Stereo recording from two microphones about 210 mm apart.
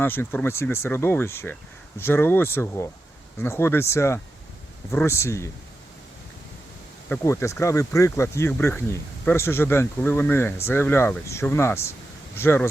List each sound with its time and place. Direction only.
0.0 s speech: 10° left (ahead or behind)
7.1 s speech: 10° left (ahead or behind)